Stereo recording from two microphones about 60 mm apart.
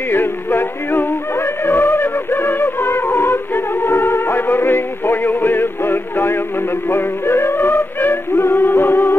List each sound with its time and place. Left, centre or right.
0.1 s music: left